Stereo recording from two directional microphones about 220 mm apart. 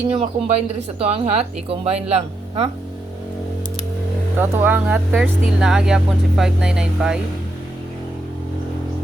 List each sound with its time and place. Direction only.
0.1 s speech: 25° right (ahead or behind)
4.4 s speech: 10° right (ahead or behind)